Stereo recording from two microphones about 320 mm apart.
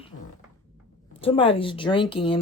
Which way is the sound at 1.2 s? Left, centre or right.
Centre.